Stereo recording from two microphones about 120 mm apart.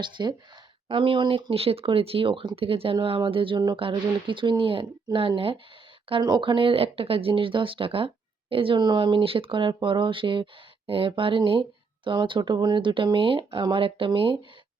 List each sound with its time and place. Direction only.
0.0 s speech: 40° right (ahead or behind)